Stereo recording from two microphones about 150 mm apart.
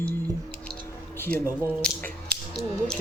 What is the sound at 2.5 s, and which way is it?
Speech, 5° left (ahead or behind).